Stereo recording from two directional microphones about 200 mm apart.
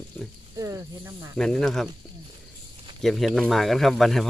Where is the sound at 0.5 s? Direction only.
15° right (ahead or behind).